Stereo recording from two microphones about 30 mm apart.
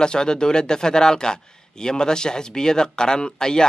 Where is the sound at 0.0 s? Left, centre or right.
Left.